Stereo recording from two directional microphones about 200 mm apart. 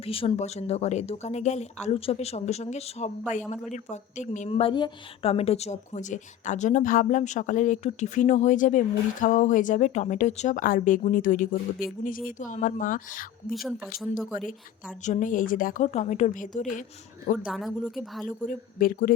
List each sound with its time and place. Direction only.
0.0 s a woman's voice: 25° left (ahead or behind)
13.5 s speech: centre (ahead or behind)
15.0 s a woman's voice: 40° left (ahead or behind)
17.4 s speech: centre (ahead or behind)
18.3 s speech: 40° left (ahead or behind)